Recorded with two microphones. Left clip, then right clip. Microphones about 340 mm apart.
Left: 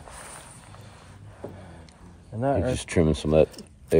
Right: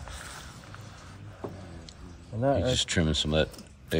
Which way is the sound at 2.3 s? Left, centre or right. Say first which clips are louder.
Left 1 dB; left.